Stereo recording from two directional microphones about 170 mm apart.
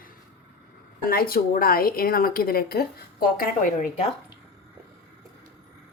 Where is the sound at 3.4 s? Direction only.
50° left (ahead or behind).